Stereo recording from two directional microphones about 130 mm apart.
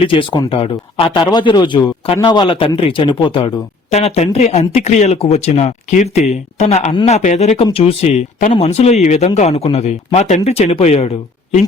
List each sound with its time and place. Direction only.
0.0 s speech: 45° left (ahead or behind)
3.9 s speech: 55° left (ahead or behind)